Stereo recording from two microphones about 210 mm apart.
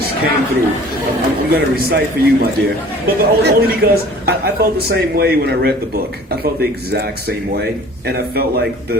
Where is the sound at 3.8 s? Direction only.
50° right (ahead or behind).